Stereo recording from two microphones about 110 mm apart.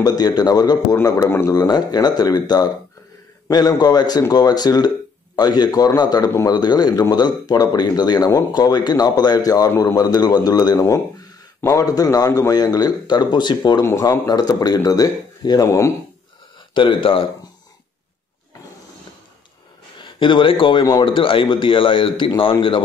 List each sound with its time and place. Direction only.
0.0 s speech: 35° left (ahead or behind)
1.0 s speech: 25° left (ahead or behind)
1.5 s speech: 35° left (ahead or behind)
13.8 s speech: 25° left (ahead or behind)
16.7 s a man's voice: 50° left (ahead or behind)
20.0 s a man's voice: 50° left (ahead or behind)